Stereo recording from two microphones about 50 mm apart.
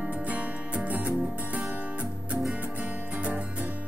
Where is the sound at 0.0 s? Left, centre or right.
Right.